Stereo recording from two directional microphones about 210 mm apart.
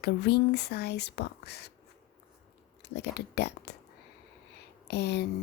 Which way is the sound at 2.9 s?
50° left (ahead or behind).